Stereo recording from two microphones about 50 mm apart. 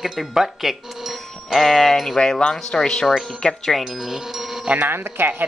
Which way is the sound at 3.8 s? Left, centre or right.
Centre.